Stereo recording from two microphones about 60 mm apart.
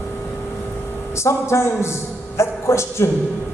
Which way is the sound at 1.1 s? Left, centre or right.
Left.